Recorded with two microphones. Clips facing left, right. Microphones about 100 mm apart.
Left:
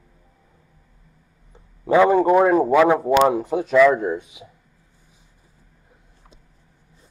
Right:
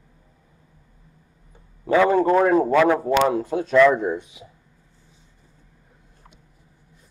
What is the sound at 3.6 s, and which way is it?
Speech, 5° left (ahead or behind).